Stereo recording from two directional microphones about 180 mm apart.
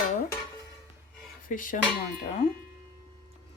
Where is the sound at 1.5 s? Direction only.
45° left (ahead or behind).